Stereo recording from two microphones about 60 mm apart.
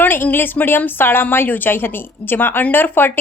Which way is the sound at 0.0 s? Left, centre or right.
Left.